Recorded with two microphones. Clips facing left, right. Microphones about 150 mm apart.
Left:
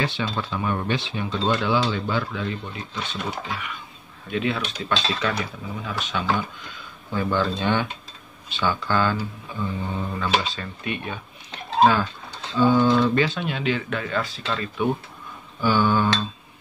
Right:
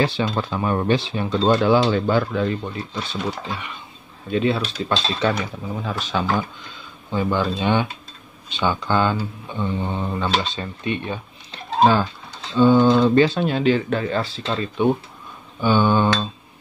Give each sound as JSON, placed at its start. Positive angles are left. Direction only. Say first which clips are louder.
{"t": 0.3, "sound": "speech", "louder": "right 4 dB", "side_deg": -40}
{"t": 7.1, "sound": "speech", "louder": "right 2 dB", "side_deg": -15}